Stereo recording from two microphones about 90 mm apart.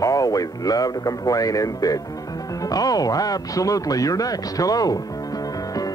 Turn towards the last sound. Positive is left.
turn(degrees=40)  # may be behind; listen again after turning